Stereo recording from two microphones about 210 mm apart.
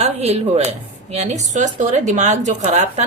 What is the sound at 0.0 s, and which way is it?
Speech, 30° right (ahead or behind).